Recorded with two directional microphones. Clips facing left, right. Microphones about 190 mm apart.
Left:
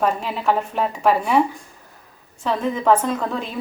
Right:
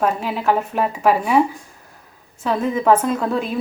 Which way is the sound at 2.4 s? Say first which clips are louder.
Right 2 dB; 5° right (ahead or behind).